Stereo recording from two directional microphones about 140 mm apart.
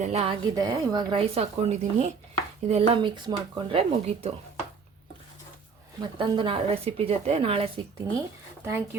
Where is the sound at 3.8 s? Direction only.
45° right (ahead or behind).